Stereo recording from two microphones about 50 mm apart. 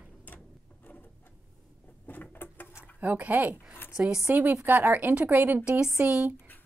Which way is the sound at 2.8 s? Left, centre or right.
Right.